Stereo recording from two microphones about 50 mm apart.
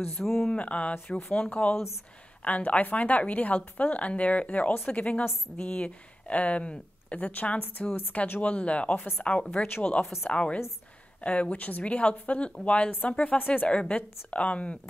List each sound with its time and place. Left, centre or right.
0.2 s speech: centre
0.5 s a woman's voice: left